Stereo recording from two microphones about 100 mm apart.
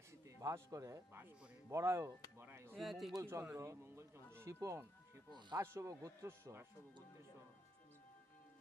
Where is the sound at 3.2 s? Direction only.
25° right (ahead or behind).